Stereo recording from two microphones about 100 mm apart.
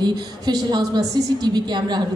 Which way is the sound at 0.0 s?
45° right (ahead or behind).